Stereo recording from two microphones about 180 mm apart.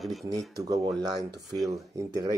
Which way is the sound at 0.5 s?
20° right (ahead or behind).